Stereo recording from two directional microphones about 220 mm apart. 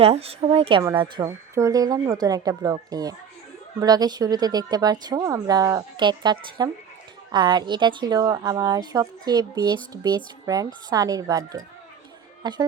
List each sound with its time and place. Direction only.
0.0 s a woman's voice: 25° right (ahead or behind)